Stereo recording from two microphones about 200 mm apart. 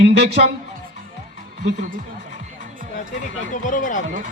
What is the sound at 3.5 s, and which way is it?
Speech, 40° left (ahead or behind).